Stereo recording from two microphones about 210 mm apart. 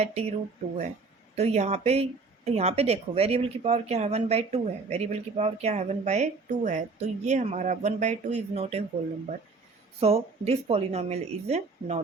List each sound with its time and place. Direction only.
0.0 s speech: 30° right (ahead or behind)
1.4 s speech: 30° right (ahead or behind)
10.0 s speech: 30° right (ahead or behind)